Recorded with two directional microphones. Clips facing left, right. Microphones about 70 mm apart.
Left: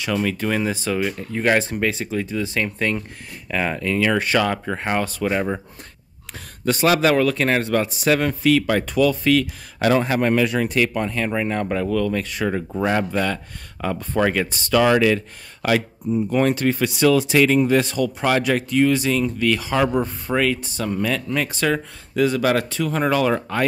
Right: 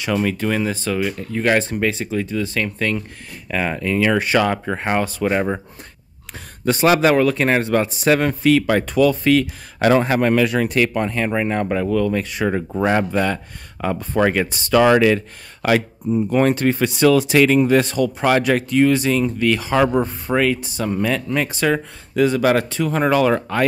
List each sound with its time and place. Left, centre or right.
0.4 s speech: centre
2.2 s speech: centre
3.4 s speech: centre; by 5.6 s right
6.6 s a man's voice: right
10.2 s speech: right
11.1 s a man's voice: right
11.7 s speech: centre; by 17.1 s right
17.1 s speech: right
20.3 s speech: centre
20.9 s speech: right
22.1 s a man's voice: right